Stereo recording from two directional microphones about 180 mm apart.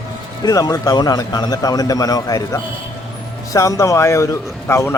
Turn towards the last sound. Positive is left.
turn(degrees=15)  # may be behind; listen again after turning